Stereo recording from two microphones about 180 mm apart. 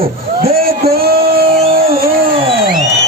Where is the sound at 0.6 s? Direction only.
55° right (ahead or behind).